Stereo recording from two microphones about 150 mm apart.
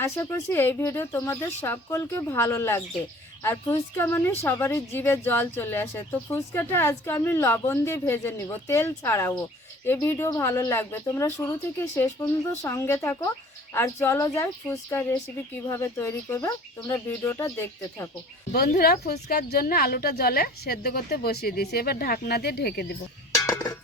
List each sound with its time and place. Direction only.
0.0 s speech: 20° left (ahead or behind)
18.8 s a woman's voice: 90° left
23.3 s music: 20° left (ahead or behind)